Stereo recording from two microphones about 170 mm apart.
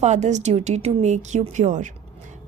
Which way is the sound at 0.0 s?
45° right (ahead or behind).